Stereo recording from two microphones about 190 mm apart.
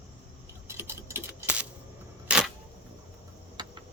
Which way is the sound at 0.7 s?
10° right (ahead or behind).